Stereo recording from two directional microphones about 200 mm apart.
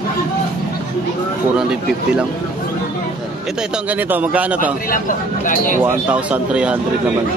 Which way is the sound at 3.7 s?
10° right (ahead or behind).